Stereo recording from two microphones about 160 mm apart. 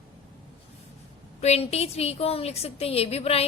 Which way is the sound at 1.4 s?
40° left (ahead or behind).